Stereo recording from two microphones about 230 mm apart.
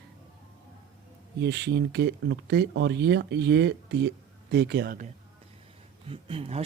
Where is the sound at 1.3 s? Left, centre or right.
Right.